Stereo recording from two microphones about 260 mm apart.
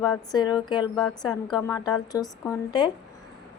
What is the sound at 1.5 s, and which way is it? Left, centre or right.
Speech, centre.